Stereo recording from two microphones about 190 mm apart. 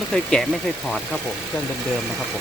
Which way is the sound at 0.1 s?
5° left (ahead or behind).